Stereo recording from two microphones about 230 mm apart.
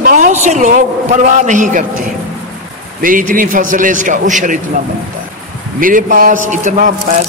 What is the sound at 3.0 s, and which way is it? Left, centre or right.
A man's voice, right.